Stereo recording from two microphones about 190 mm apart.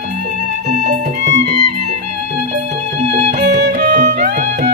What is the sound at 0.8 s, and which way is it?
Music, 40° right (ahead or behind).